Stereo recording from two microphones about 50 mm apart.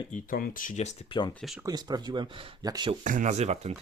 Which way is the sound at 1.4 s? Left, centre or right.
Centre.